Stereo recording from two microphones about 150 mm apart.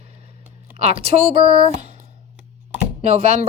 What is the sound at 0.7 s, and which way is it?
Speech, 45° right (ahead or behind).